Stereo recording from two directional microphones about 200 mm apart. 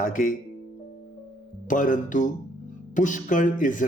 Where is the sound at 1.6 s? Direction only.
40° left (ahead or behind).